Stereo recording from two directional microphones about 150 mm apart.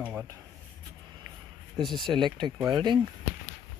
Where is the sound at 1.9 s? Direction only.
30° right (ahead or behind).